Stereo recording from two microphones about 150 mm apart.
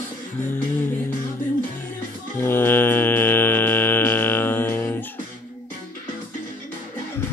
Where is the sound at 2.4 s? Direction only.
15° left (ahead or behind).